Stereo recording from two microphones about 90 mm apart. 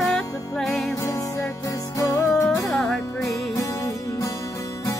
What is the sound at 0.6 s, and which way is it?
Music, 5° left (ahead or behind).